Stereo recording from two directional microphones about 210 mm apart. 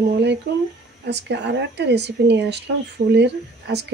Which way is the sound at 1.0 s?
55° right (ahead or behind).